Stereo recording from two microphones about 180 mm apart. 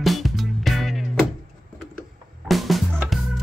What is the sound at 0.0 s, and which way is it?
Music, centre (ahead or behind).